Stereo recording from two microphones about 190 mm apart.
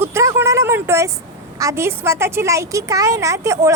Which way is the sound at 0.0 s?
15° right (ahead or behind).